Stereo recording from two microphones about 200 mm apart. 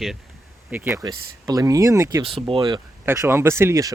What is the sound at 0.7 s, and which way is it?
Speech, 10° right (ahead or behind).